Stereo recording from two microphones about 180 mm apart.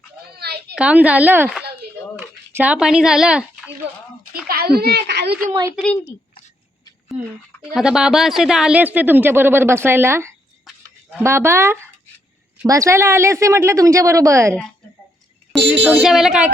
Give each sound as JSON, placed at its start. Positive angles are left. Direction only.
{"t": 0.3, "sound": "a sound", "side_deg": -65}
{"t": 0.8, "sound": "speech", "side_deg": -5}
{"t": 2.1, "sound": "a sound", "side_deg": -10}
{"t": 4.4, "sound": "a child's voice", "side_deg": -60}
{"t": 5.7, "sound": "speech", "side_deg": 5}
{"t": 7.7, "sound": "speech", "side_deg": -5}
{"t": 10.7, "sound": "livestock", "side_deg": 0}
{"t": 11.2, "sound": "speech", "side_deg": -15}
{"t": 15.8, "sound": "speech", "side_deg": -5}